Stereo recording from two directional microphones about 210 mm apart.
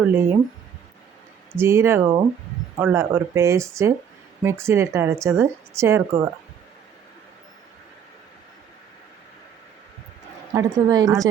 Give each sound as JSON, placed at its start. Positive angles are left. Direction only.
{"t": 0.0, "sound": "a woman's voice", "side_deg": -10}
{"t": 1.5, "sound": "a woman's voice", "side_deg": -10}
{"t": 10.5, "sound": "a woman's voice", "side_deg": -15}